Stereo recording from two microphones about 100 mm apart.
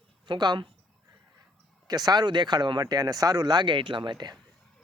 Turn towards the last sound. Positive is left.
turn(degrees=-45)  # may be behind; listen again after turning